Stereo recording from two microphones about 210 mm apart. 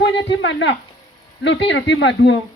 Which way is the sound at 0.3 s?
60° left (ahead or behind).